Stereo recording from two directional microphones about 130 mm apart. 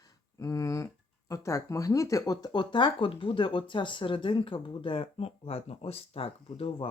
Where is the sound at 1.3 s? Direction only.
25° left (ahead or behind).